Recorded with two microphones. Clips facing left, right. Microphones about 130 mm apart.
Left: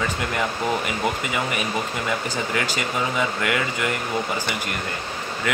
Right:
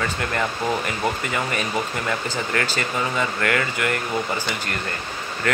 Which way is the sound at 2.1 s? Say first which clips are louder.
Even; 15° left (ahead or behind).